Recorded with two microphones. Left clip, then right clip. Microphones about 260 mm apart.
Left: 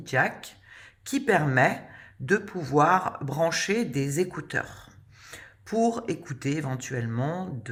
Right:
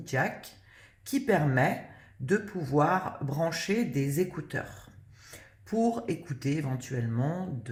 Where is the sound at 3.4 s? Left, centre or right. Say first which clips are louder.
Left 5 dB; left.